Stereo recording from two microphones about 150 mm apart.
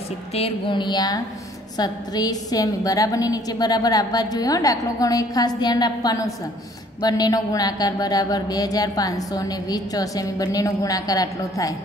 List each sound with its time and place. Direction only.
0.3 s a woman's voice: 35° left (ahead or behind)